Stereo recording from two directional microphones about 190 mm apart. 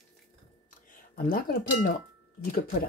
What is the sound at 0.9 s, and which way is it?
Speech, 45° left (ahead or behind).